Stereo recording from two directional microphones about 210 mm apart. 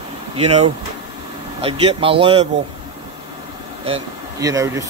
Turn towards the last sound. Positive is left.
turn(degrees=-15)  # may be behind; listen again after turning